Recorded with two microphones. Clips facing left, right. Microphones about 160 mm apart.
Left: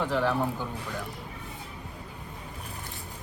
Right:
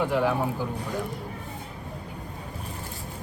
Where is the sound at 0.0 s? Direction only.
10° right (ahead or behind).